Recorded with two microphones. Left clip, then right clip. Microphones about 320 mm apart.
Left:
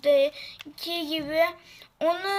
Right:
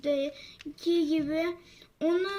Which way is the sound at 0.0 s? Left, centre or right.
Left.